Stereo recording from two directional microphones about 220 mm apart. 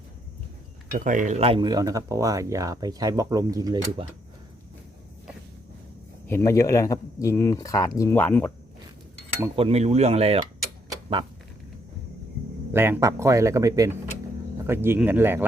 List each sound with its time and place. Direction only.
0.9 s speech: 35° right (ahead or behind); by 4.0 s 15° right (ahead or behind)
6.2 s speech: 10° left (ahead or behind)
9.6 s speech: 25° right (ahead or behind)
12.7 s speech: 10° right (ahead or behind)